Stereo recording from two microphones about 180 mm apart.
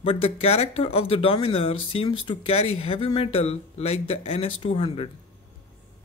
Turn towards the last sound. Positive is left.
turn(degrees=30)  # may be behind; listen again after turning